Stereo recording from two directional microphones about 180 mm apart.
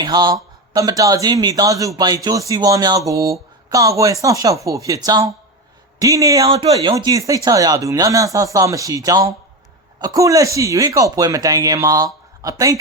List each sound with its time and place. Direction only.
0.0 s speech: 25° right (ahead or behind)